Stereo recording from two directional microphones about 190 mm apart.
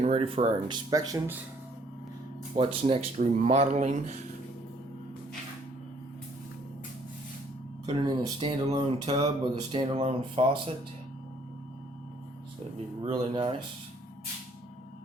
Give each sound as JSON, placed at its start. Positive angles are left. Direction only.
{"t": 0.0, "sound": "speech", "side_deg": -30}
{"t": 2.6, "sound": "speech", "side_deg": -30}
{"t": 7.9, "sound": "speech", "side_deg": -25}
{"t": 13.1, "sound": "speech", "side_deg": -25}